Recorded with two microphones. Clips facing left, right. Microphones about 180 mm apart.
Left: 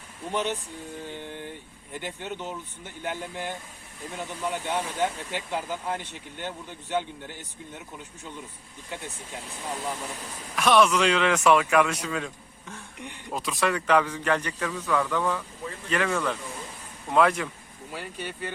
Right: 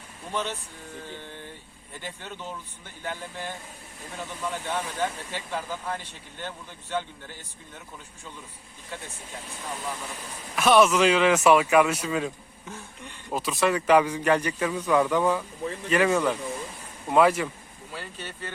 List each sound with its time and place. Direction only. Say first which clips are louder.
0.3 s speech: left 3 dB; 20° left (ahead or behind)
1.2 s vehicle: left 4 dB; 15° left (ahead or behind)
1.9 s speech: left 4 dB; 20° left (ahead or behind)
4.5 s speech: left 2 dB; 15° left (ahead or behind)
10.5 s a man's voice: right 2 dB; 5° right (ahead or behind)
17.9 s speech: left 3 dB; 10° left (ahead or behind)